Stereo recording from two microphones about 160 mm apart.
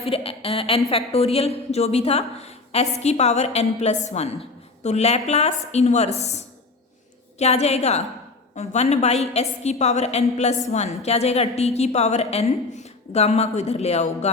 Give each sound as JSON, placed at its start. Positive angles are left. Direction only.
{"t": 0.0, "sound": "a woman's voice", "side_deg": 35}